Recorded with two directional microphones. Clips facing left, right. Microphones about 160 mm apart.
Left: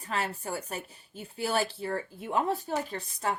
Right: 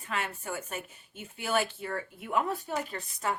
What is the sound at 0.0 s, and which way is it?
Speech, 35° left (ahead or behind).